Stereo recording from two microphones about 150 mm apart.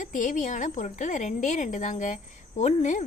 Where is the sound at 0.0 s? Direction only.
60° left (ahead or behind).